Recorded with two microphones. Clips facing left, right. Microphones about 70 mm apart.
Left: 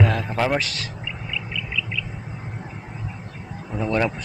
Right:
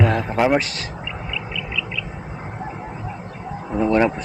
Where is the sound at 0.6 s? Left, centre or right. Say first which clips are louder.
Right 1 dB; right.